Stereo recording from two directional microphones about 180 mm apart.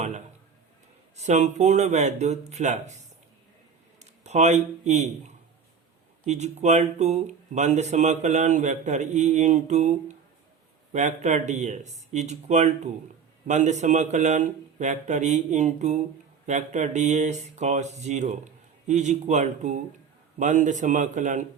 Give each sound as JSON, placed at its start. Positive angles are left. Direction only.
{"t": 1.1, "sound": "speech", "side_deg": -40}
{"t": 4.2, "sound": "speech", "side_deg": -40}